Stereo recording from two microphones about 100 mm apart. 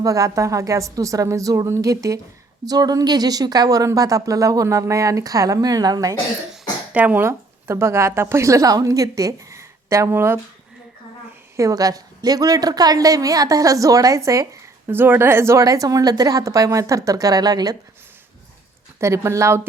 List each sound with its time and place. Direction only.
0.0 s a woman's voice: 35° right (ahead or behind)
6.9 s speech: 15° right (ahead or behind)
11.5 s a woman's voice: 35° right (ahead or behind)
14.9 s a woman's voice: 20° right (ahead or behind); by 17.7 s 40° right (ahead or behind)
18.9 s a woman's voice: 30° right (ahead or behind)